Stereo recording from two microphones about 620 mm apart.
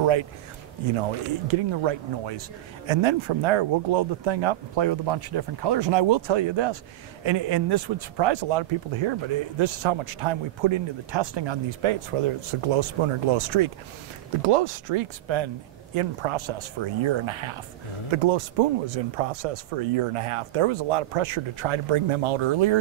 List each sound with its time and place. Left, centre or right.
0.0 s a man's voice: right
1.5 s speech: right